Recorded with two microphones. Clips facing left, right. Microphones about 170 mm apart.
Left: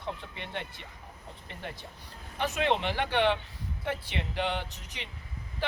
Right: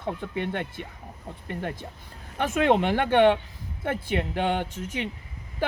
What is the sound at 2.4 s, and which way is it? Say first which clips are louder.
Speech: right 6 dB; 50° right (ahead or behind).